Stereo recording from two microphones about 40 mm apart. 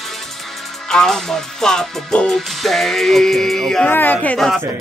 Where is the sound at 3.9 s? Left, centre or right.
Left.